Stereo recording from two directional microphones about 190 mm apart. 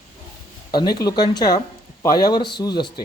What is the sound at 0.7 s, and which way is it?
Speech, 20° left (ahead or behind).